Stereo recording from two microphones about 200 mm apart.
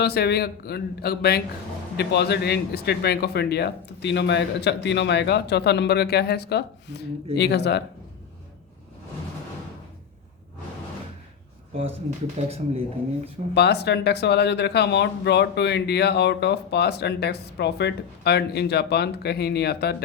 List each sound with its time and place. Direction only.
0.0 s speech: 55° left (ahead or behind)
12.4 s speech: 30° right (ahead or behind)
13.5 s speech: 55° left (ahead or behind)